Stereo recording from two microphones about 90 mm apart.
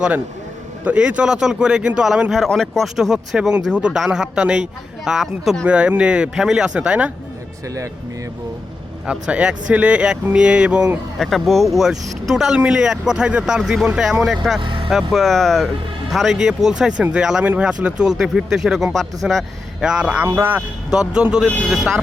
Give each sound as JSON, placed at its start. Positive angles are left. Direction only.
{"t": 0.9, "sound": "speech", "side_deg": -15}
{"t": 9.0, "sound": "speech", "side_deg": -10}
{"t": 11.2, "sound": "speech", "side_deg": 0}
{"t": 14.6, "sound": "speech", "side_deg": -65}
{"t": 15.1, "sound": "speech", "side_deg": 0}
{"t": 20.2, "sound": "speech", "side_deg": -25}
{"t": 20.6, "sound": "speech", "side_deg": -10}